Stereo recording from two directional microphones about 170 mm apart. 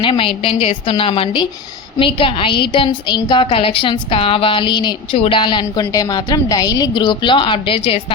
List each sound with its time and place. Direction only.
0.0 s a woman's voice: 30° left (ahead or behind)